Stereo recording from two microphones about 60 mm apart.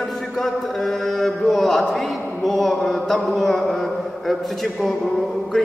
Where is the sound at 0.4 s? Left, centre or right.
Centre.